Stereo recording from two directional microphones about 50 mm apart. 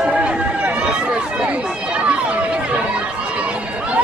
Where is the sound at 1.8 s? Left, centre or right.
Right.